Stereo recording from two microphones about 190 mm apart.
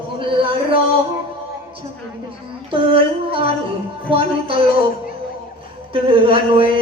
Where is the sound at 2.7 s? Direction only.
30° right (ahead or behind).